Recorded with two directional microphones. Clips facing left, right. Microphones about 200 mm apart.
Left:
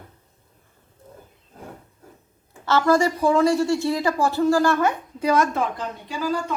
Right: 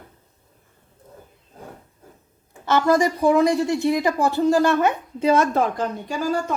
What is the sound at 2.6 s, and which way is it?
A woman's voice, 15° right (ahead or behind).